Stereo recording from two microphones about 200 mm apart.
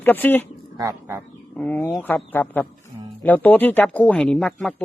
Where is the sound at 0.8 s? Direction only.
15° right (ahead or behind).